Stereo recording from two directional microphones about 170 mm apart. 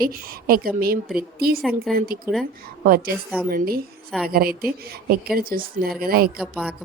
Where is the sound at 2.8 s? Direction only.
60° right (ahead or behind).